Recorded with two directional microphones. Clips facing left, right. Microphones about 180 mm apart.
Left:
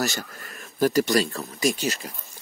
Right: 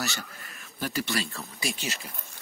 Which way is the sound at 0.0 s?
40° left (ahead or behind).